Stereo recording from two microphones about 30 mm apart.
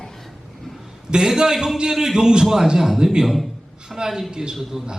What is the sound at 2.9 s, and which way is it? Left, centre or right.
A man's voice, right.